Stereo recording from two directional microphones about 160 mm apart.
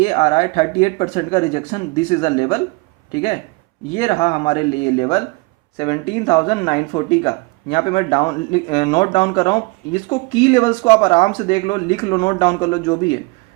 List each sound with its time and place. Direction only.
0.0 s speech: 35° left (ahead or behind)
3.9 s speech: 35° left (ahead or behind)